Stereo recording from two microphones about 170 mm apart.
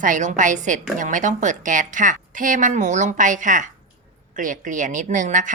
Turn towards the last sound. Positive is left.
turn(degrees=-50)  # may be behind; listen again after turning